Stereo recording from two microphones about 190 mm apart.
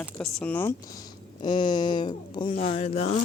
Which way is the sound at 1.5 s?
25° left (ahead or behind).